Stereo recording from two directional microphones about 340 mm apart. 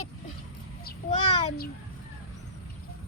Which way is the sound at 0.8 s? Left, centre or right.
Left.